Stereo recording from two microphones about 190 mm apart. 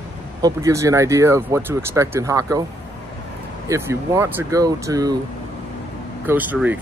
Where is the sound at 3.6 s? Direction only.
15° right (ahead or behind).